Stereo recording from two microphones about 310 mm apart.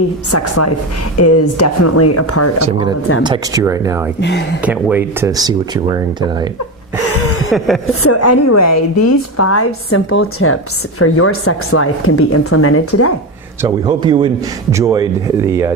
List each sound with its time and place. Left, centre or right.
0.3 s a woman's voice: left
2.6 s speech: centre
4.2 s speech: left
4.6 s speech: centre
7.1 s a sound: left
8.0 s a woman's voice: left
13.6 s speech: centre